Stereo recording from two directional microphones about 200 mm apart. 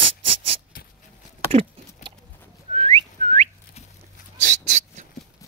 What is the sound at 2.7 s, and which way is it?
Whistling, 30° right (ahead or behind).